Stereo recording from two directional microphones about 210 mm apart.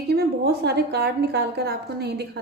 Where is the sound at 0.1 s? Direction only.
50° right (ahead or behind).